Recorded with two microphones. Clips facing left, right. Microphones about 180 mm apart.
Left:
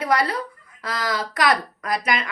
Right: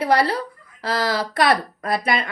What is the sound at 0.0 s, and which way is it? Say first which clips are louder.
A woman's voice: right 3 dB; 30° right (ahead or behind).